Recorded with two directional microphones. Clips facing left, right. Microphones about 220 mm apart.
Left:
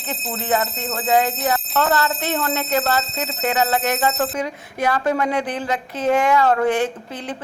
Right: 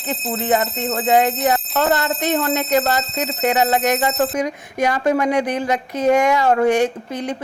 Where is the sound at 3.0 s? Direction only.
Centre (ahead or behind).